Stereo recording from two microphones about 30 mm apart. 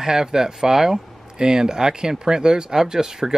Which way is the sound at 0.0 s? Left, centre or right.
Right.